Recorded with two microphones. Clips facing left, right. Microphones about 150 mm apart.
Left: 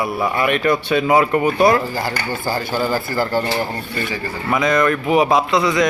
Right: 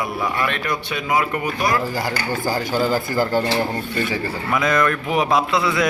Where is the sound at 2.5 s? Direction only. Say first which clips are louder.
Even; 15° right (ahead or behind).